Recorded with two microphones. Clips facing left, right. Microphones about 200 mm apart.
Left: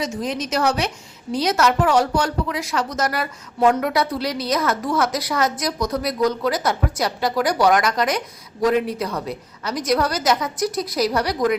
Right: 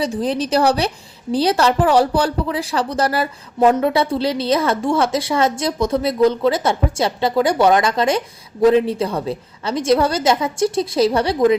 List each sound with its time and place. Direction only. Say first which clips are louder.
0.0 s a woman's voice: right 5 dB; 35° right (ahead or behind)